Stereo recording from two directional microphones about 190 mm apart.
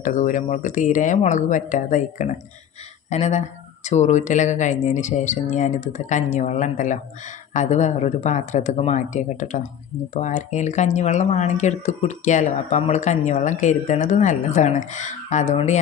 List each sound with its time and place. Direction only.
0.0 s speech: 40° left (ahead or behind)